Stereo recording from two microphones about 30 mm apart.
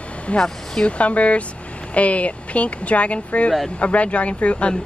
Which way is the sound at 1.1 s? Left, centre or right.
Left.